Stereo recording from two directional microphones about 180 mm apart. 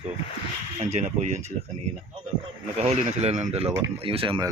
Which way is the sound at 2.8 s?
40° right (ahead or behind).